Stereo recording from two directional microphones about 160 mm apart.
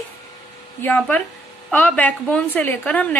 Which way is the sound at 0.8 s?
10° left (ahead or behind).